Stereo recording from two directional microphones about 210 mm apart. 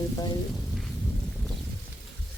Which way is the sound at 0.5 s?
Centre (ahead or behind).